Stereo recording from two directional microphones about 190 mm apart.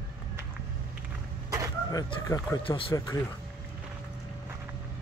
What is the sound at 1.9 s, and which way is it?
Speech, 20° left (ahead or behind).